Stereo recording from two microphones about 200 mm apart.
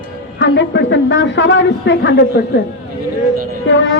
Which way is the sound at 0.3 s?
65° left (ahead or behind).